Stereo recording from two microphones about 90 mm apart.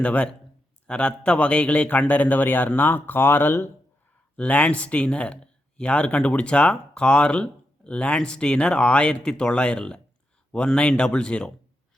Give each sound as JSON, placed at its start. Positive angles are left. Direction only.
{"t": 0.0, "sound": "speech", "side_deg": 15}